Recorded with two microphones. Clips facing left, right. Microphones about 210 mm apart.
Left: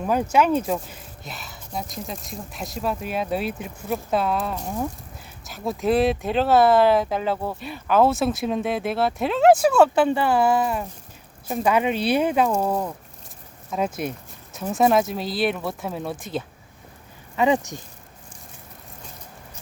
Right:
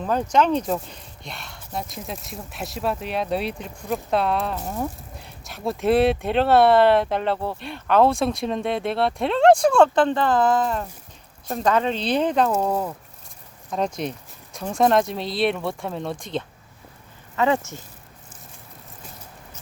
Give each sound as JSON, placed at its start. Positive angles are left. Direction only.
{"t": 0.0, "sound": "speech", "side_deg": 10}
{"t": 13.7, "sound": "speech", "side_deg": 5}